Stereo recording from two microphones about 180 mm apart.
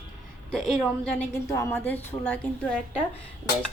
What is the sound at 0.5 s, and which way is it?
Speech, centre (ahead or behind).